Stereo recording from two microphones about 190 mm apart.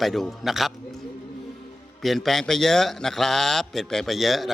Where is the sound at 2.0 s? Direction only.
Centre (ahead or behind).